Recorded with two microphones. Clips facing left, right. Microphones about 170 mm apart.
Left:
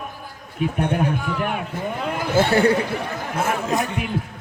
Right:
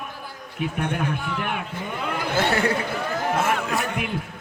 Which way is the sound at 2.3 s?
30° left (ahead or behind).